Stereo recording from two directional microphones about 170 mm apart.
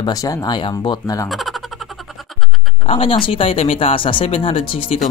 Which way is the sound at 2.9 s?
35° left (ahead or behind).